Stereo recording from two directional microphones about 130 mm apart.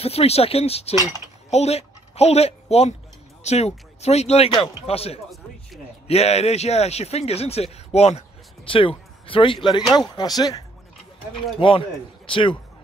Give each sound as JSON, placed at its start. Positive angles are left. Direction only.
{"t": 0.0, "sound": "speech", "side_deg": 50}
{"t": 11.5, "sound": "speech", "side_deg": 45}